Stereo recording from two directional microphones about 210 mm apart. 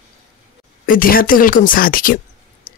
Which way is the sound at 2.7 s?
45° left (ahead or behind).